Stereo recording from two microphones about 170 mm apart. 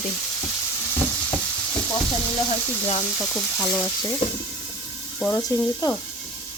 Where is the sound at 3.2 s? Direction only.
15° left (ahead or behind).